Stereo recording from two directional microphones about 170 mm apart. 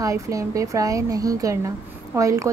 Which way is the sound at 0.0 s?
20° right (ahead or behind).